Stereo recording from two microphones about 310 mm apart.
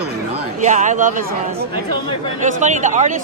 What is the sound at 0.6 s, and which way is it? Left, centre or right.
Speech, right.